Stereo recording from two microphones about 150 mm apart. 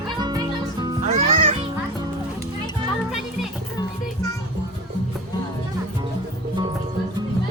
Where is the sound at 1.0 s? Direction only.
50° right (ahead or behind).